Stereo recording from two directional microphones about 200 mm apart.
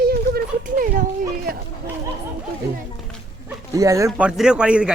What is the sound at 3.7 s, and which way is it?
Speech, 15° right (ahead or behind).